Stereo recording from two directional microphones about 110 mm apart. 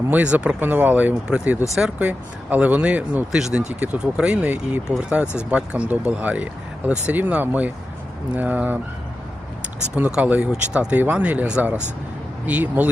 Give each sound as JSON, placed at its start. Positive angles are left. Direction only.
{"t": 0.1, "sound": "speech", "side_deg": -15}
{"t": 5.2, "sound": "speech", "side_deg": 20}
{"t": 5.5, "sound": "speech", "side_deg": -10}
{"t": 10.2, "sound": "speech", "side_deg": -10}